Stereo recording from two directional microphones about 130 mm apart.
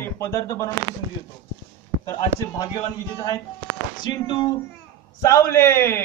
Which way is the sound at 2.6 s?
30° left (ahead or behind).